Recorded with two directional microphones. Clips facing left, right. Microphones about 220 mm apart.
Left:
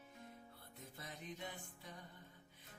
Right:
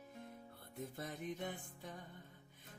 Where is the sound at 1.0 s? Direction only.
50° right (ahead or behind).